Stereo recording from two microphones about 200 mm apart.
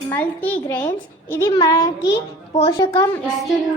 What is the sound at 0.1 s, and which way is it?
A child's voice, 10° left (ahead or behind).